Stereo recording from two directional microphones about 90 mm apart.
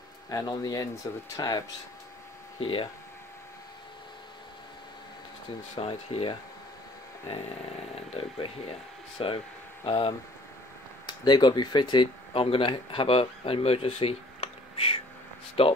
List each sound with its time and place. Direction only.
0.3 s speech: 45° left (ahead or behind)
2.6 s speech: 70° left (ahead or behind)
5.8 s speech: 90° left
8.2 s speech: 90° left
9.8 s speech: 70° left (ahead or behind)
11.1 s speech: 55° left (ahead or behind); by 15.7 s 90° left